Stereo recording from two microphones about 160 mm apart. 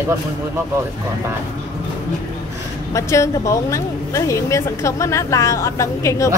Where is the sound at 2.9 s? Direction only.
20° left (ahead or behind).